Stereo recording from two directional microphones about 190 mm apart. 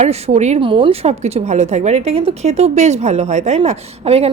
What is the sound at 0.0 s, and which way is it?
A woman's voice, 35° right (ahead or behind).